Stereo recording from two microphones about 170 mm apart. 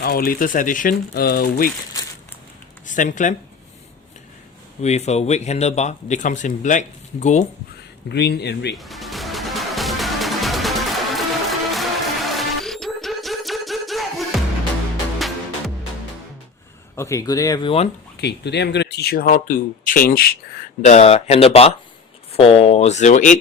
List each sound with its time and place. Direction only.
0.0 s speech: 60° left (ahead or behind)
2.8 s speech: 50° left (ahead or behind)
4.8 s speech: 40° left (ahead or behind)
8.1 s speech: 75° left (ahead or behind)
8.7 s music: centre (ahead or behind)
16.9 s speech: 15° left (ahead or behind)
18.2 s speech: 80° left; by 20.4 s 60° left (ahead or behind)
20.8 s speech: 40° left (ahead or behind)